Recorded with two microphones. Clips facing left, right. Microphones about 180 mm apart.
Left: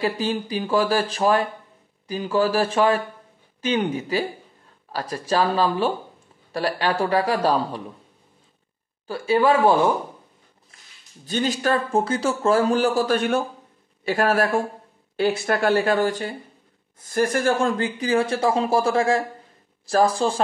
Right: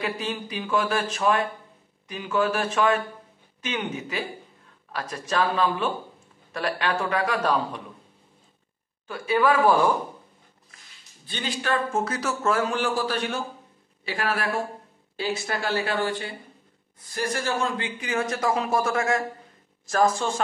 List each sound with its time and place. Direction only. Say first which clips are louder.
0.0 s speech: left 6 dB; 35° left (ahead or behind)
9.0 s speech: left 3 dB; 30° left (ahead or behind)
11.2 s speech: left 6 dB; 45° left (ahead or behind)
15.1 s speech: left 7 dB; 60° left (ahead or behind); by 20.3 s 35° left (ahead or behind)